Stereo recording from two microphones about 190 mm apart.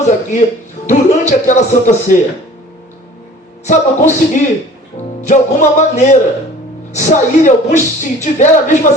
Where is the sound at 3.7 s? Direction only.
40° left (ahead or behind).